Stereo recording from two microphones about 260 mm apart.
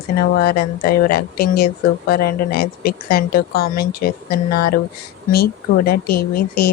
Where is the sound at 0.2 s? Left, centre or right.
Left.